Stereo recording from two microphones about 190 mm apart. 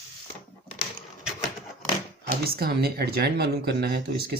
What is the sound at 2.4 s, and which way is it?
Speech, 55° right (ahead or behind).